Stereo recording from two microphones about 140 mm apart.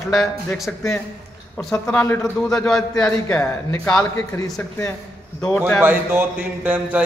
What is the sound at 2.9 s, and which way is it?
Speech, 25° left (ahead or behind).